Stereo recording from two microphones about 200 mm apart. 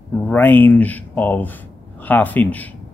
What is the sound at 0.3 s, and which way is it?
Speech, 10° left (ahead or behind).